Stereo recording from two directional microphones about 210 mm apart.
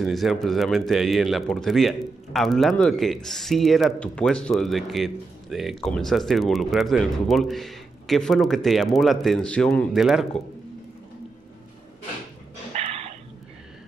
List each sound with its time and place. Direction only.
0.0 s speech: centre (ahead or behind)
12.7 s dog: 30° right (ahead or behind)